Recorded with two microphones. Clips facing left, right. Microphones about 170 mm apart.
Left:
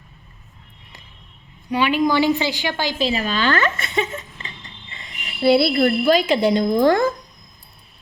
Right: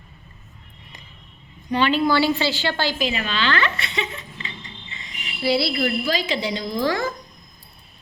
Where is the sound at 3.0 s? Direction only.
35° left (ahead or behind); by 7.1 s 50° left (ahead or behind).